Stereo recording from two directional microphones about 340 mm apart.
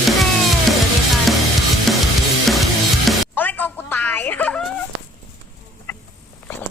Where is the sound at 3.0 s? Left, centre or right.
Centre.